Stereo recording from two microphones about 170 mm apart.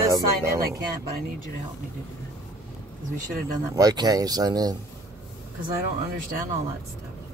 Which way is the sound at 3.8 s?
20° right (ahead or behind).